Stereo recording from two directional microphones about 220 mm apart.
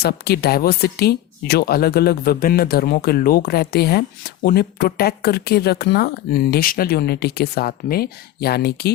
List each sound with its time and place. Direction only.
0.0 s speech: 50° left (ahead or behind)